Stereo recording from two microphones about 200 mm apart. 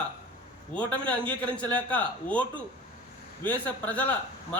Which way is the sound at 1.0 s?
5° left (ahead or behind).